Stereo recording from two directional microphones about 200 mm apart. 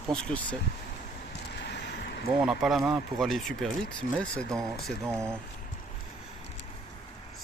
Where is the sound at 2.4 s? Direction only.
Centre (ahead or behind).